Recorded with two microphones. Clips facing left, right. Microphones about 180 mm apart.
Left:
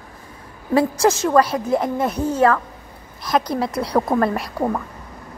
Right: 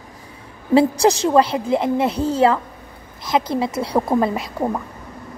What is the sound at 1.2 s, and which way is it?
A woman's voice, 25° right (ahead or behind).